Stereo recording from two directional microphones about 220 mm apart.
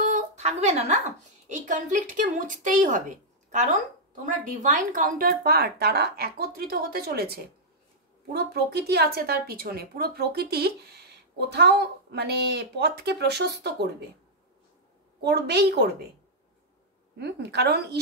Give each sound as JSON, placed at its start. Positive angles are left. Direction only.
{"t": 0.0, "sound": "a sound", "side_deg": -30}
{"t": 1.5, "sound": "a woman's voice", "side_deg": -35}
{"t": 15.2, "sound": "speech", "side_deg": -50}
{"t": 17.2, "sound": "speech", "side_deg": -50}